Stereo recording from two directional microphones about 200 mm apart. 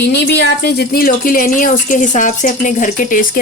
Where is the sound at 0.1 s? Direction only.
60° left (ahead or behind).